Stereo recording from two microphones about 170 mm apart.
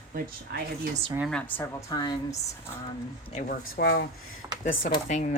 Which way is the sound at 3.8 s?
75° left (ahead or behind).